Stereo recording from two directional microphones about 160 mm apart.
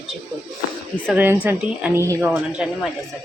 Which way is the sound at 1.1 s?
10° right (ahead or behind).